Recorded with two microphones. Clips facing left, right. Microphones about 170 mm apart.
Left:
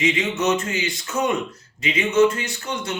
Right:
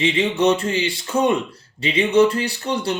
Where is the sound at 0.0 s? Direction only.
30° right (ahead or behind).